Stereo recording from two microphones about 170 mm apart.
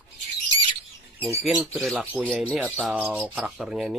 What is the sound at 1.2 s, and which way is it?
Speech, centre (ahead or behind).